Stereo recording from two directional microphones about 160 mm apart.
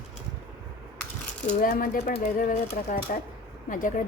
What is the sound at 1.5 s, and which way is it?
A woman's voice, 60° left (ahead or behind).